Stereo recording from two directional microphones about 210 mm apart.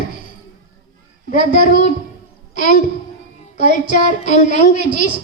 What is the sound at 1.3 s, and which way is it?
Speech, 40° left (ahead or behind).